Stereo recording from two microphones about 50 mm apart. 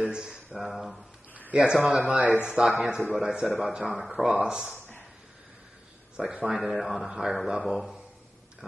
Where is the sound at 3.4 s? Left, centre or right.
Centre.